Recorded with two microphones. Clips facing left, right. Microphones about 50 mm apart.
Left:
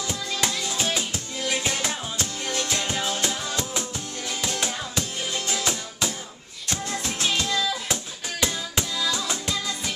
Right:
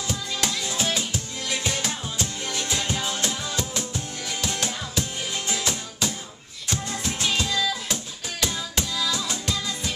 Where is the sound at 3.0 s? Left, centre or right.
Centre.